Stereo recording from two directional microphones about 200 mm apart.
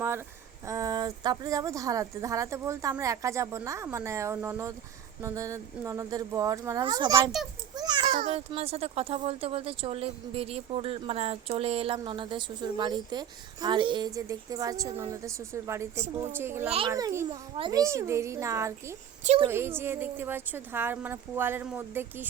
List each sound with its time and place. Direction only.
0.6 s a woman's voice: 15° right (ahead or behind)
7.8 s a sound: 20° right (ahead or behind)
8.3 s a woman's voice: 30° right (ahead or behind); by 18.9 s 15° right (ahead or behind)
19.2 s a woman's voice: 35° right (ahead or behind)
19.5 s a woman's voice: 10° right (ahead or behind)